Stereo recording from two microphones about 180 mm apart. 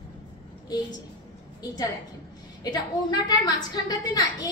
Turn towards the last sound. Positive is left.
turn(degrees=20)  # may be behind; listen again after turning